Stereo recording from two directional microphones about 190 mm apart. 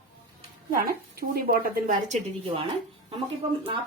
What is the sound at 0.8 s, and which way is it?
Speech, 50° right (ahead or behind).